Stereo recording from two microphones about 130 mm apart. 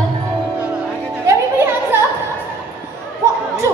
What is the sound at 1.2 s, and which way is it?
Music, 20° right (ahead or behind).